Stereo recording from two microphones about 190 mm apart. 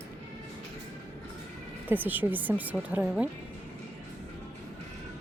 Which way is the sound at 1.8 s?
10° right (ahead or behind).